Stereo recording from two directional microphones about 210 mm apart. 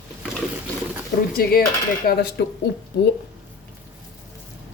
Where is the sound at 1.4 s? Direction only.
45° left (ahead or behind).